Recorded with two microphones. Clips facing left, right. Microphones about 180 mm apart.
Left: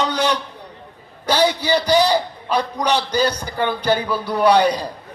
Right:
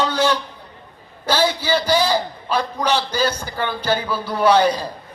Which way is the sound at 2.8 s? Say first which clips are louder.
Left 1 dB; 15° left (ahead or behind).